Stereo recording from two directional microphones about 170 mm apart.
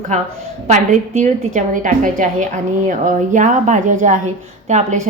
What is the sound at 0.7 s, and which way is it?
A woman's voice, 45° right (ahead or behind).